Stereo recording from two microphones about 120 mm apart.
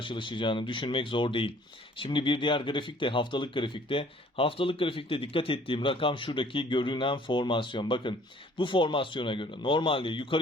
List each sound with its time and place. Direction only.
0.0 s speech: 45° left (ahead or behind)